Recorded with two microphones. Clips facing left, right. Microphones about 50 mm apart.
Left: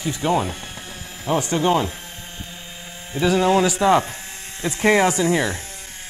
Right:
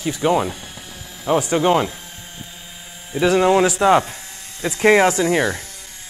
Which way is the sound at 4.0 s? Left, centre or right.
Left.